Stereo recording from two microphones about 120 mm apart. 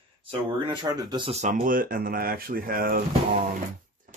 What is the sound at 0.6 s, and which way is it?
Speech, 40° right (ahead or behind).